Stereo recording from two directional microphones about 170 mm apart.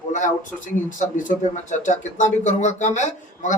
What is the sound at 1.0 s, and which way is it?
Speech, 45° left (ahead or behind).